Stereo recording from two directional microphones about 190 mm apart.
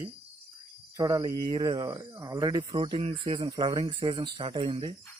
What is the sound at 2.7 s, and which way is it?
Speech, 30° right (ahead or behind).